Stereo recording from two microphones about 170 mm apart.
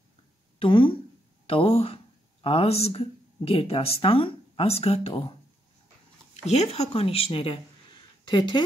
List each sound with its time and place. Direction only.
0.6 s speech: 30° left (ahead or behind)
6.4 s speech: 40° left (ahead or behind)